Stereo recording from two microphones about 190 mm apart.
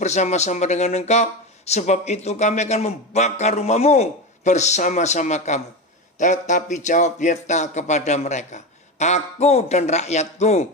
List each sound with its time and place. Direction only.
0.0 s speech: 35° left (ahead or behind)